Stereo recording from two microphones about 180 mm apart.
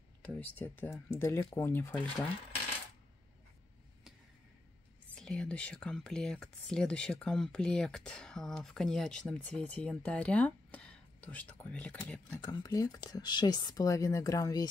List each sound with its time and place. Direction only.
0.2 s speech: 10° left (ahead or behind)
5.1 s speech: 5° left (ahead or behind)
12.4 s speech: 20° left (ahead or behind)